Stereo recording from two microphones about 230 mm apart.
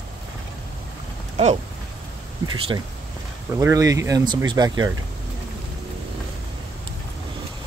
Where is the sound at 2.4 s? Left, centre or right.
Right.